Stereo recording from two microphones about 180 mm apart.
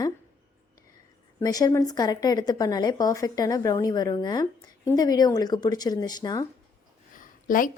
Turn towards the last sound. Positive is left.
turn(degrees=50)  # may be behind; listen again after turning